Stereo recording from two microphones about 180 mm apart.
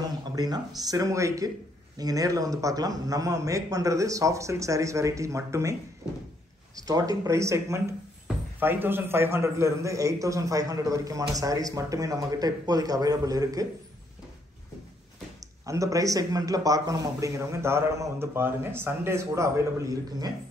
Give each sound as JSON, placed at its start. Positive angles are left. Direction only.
{"t": 0.4, "sound": "a man's voice", "side_deg": -20}
{"t": 6.9, "sound": "a man's voice", "side_deg": -20}
{"t": 15.6, "sound": "a man's voice", "side_deg": -20}